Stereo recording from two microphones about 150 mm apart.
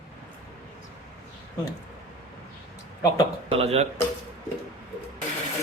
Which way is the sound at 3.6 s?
45° right (ahead or behind).